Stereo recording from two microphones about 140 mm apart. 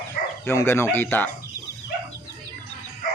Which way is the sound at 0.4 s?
15° left (ahead or behind).